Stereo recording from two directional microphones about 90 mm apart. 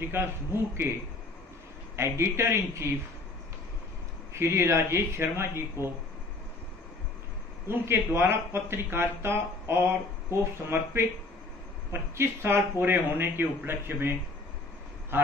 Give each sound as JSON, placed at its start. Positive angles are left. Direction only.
{"t": 0.1, "sound": "speech", "side_deg": -25}
{"t": 2.0, "sound": "speech", "side_deg": -30}
{"t": 4.3, "sound": "speech", "side_deg": -30}
{"t": 7.6, "sound": "speech", "side_deg": -25}